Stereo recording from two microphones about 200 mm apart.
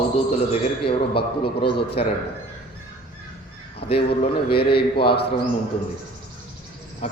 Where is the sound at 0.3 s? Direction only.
30° left (ahead or behind).